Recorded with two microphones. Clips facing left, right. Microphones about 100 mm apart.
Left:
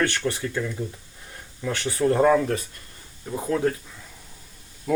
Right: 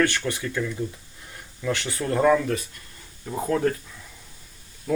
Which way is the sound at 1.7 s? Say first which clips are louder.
Left 4 dB; 30° left (ahead or behind).